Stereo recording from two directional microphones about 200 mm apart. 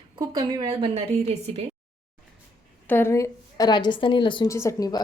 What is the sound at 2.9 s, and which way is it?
A woman's voice, 10° left (ahead or behind).